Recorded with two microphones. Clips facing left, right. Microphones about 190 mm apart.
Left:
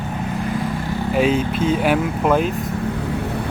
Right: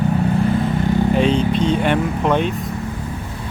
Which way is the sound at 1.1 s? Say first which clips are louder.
Left 3 dB; 5° left (ahead or behind).